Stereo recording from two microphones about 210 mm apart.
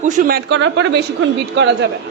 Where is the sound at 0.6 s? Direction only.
60° right (ahead or behind).